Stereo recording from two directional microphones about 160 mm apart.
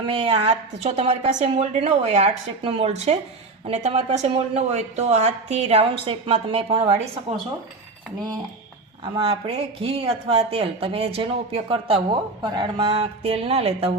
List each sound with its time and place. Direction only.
0.0 s speech: 40° right (ahead or behind)
9.1 s speech: 35° right (ahead or behind)